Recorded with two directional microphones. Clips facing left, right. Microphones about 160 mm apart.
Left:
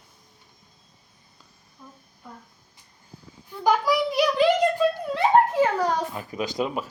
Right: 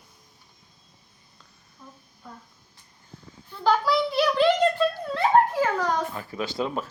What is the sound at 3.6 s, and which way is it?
A child's voice, 15° left (ahead or behind).